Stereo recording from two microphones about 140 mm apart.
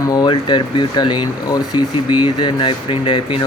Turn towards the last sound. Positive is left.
turn(degrees=40)  # may be behind; listen again after turning